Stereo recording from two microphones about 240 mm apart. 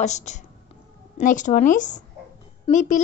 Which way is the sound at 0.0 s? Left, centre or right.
Left.